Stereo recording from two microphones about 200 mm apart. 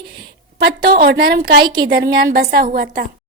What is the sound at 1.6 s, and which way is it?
Speech, 20° right (ahead or behind).